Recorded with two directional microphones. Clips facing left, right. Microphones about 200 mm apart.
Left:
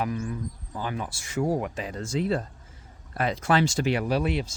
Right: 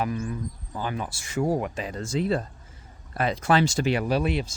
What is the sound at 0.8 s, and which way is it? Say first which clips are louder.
Speech: right 1 dB; 30° right (ahead or behind).